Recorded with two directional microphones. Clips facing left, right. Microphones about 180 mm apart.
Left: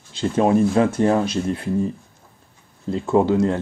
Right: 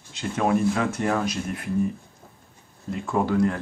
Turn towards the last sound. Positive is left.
turn(degrees=25)  # may be behind; listen again after turning